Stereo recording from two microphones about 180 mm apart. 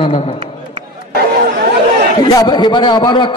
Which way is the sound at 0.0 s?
30° left (ahead or behind).